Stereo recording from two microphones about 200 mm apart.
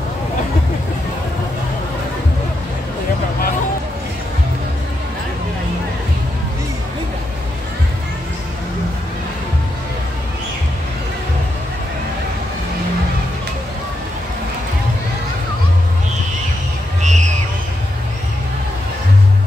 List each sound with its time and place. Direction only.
17.0 s music: 35° right (ahead or behind)